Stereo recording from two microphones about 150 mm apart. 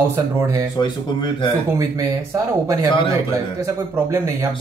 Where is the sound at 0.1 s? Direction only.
20° right (ahead or behind).